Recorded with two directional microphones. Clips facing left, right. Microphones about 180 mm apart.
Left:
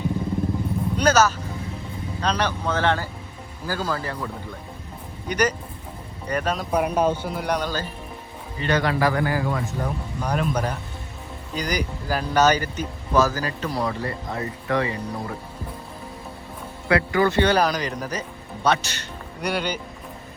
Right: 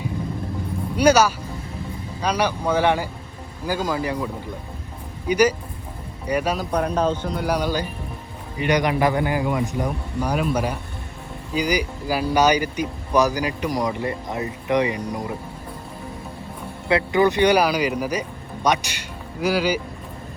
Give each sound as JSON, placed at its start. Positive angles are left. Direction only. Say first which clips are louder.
{"t": 0.9, "sound": "speech", "louder": "right 3 dB", "side_deg": -10}
{"t": 5.3, "sound": "speech", "louder": "right 5 dB", "side_deg": -10}
{"t": 6.7, "sound": "a man's voice", "louder": "left 3 dB", "side_deg": 10}
{"t": 7.5, "sound": "speech", "louder": "right 3 dB", "side_deg": -10}
{"t": 16.9, "sound": "speech", "louder": "right 1 dB", "side_deg": -20}